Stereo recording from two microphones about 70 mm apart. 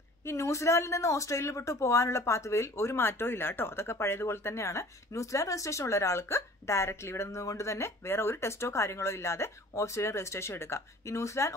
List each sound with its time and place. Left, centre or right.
0.2 s speech: left